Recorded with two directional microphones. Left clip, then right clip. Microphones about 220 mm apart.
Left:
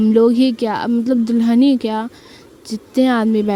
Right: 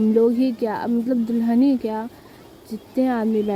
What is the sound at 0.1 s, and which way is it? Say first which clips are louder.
A woman's voice: left 6 dB; 40° left (ahead or behind).